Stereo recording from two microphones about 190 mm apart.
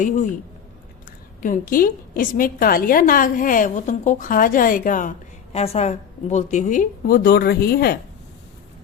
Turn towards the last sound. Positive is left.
turn(degrees=55)  # may be behind; listen again after turning